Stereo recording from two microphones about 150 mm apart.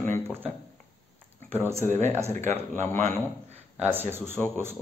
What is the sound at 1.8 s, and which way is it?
Speech, 50° right (ahead or behind).